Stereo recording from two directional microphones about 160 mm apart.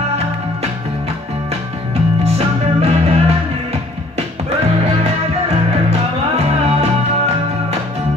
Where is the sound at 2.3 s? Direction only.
40° right (ahead or behind).